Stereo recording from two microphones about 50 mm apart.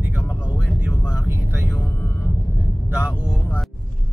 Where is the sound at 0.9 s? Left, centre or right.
Centre.